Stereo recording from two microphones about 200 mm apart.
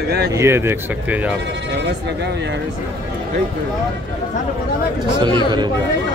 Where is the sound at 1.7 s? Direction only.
55° right (ahead or behind).